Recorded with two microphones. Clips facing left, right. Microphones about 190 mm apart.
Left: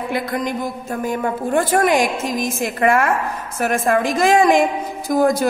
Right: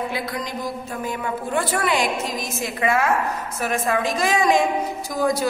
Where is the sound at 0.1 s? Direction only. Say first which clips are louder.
Left 6 dB; 50° left (ahead or behind).